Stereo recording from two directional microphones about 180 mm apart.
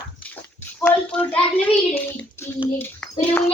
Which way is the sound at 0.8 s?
5° left (ahead or behind).